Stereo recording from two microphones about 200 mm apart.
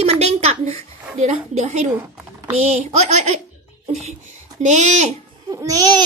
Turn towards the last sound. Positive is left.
turn(degrees=-20)  # may be behind; listen again after turning